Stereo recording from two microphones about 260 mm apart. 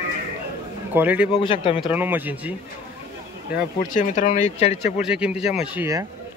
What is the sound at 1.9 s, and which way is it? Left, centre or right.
Speech, centre.